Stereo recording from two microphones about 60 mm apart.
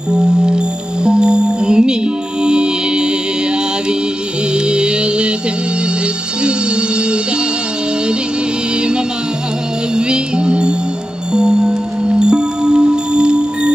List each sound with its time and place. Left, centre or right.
0.4 s music: centre
4.6 s music: centre
9.9 s music: centre